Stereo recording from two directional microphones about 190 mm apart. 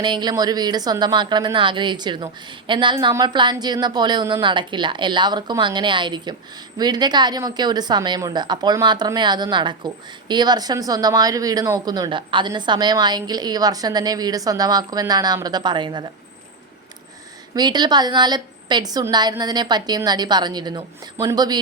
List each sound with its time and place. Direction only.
0.0 s a woman's voice: 25° right (ahead or behind)
17.5 s a woman's voice: 20° right (ahead or behind)